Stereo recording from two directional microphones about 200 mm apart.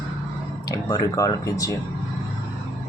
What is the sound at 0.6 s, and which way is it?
Speech, 20° left (ahead or behind).